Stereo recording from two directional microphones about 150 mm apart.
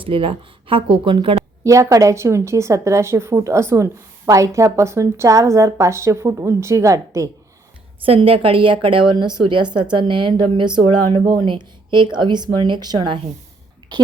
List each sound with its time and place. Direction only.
0.0 s speech: 35° right (ahead or behind)
1.6 s a woman's voice: 20° right (ahead or behind)
8.0 s a woman's voice: 40° right (ahead or behind)